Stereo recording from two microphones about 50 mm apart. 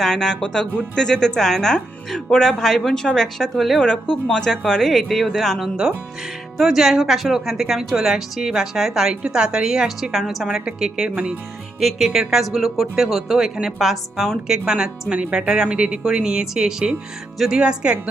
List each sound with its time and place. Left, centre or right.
0.0 s a woman's voice: centre
3.8 s a woman's voice: centre
11.8 s speech: centre
12.0 s speech: centre
14.7 s a woman's voice: centre
17.3 s speech: centre
17.6 s speech: centre